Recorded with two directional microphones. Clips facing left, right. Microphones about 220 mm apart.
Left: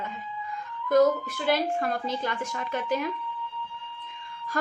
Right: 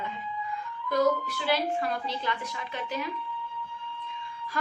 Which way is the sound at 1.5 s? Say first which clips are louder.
Left 2 dB; 45° left (ahead or behind).